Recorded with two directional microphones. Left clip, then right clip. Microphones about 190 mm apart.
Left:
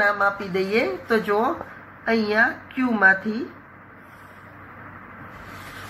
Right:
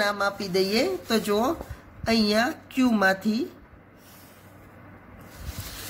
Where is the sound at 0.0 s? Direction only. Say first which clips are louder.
Left 5 dB; 70° right (ahead or behind); by 3.2 s 90° right.